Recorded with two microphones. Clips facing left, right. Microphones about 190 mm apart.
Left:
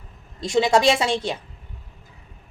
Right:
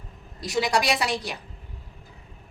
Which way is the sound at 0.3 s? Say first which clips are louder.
Left 6 dB; 25° left (ahead or behind).